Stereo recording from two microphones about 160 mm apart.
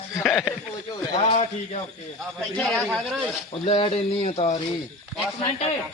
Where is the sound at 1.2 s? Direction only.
35° left (ahead or behind).